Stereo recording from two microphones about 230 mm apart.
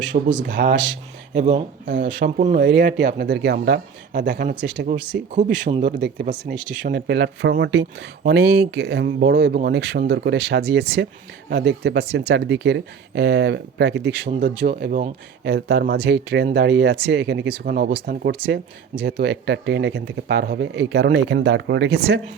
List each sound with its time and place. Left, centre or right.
0.4 s speech: right
1.3 s speech: right
1.8 s speech: right
5.3 s speech: right
6.5 s speech: right
14.3 s speech: right